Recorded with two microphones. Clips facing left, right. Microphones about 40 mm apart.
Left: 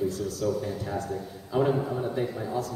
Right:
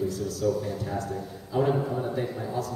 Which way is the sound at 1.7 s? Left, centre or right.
Centre.